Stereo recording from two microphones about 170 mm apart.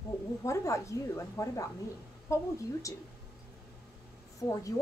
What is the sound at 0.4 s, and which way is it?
A woman's voice, 20° left (ahead or behind).